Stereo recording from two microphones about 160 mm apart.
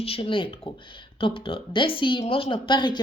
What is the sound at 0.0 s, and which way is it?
Speech, 35° left (ahead or behind).